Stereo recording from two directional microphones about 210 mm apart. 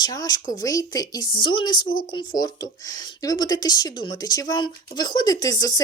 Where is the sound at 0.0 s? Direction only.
20° left (ahead or behind).